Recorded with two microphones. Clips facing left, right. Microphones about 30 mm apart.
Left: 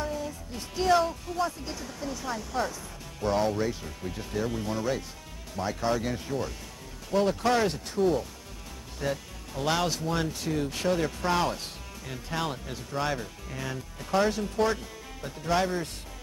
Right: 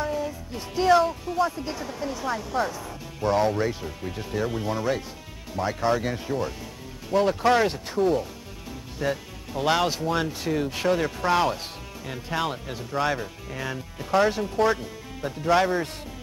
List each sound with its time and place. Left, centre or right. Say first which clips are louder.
0.0 s speech: right 5 dB; centre